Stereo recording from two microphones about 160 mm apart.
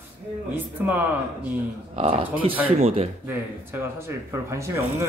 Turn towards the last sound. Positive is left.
turn(degrees=-15)  # may be behind; listen again after turning